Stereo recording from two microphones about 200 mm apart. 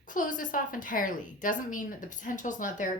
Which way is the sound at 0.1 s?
40° left (ahead or behind).